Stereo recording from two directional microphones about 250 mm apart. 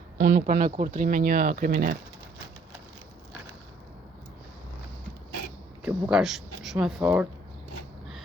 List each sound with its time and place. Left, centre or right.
0.2 s speech: right
0.4 s speech: right
5.8 s speech: centre